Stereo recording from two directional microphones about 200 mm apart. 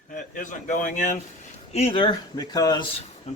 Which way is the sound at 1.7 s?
30° left (ahead or behind).